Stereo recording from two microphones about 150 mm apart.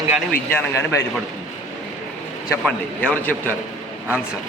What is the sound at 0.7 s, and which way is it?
Speech, 15° left (ahead or behind).